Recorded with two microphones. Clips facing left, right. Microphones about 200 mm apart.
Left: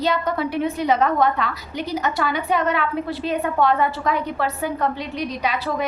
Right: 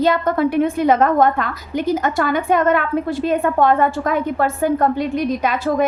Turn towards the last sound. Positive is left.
turn(degrees=-50)  # may be behind; listen again after turning